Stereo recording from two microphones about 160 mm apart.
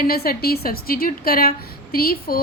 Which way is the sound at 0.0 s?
70° left (ahead or behind).